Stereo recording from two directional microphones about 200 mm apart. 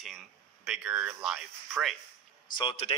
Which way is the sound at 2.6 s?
30° left (ahead or behind).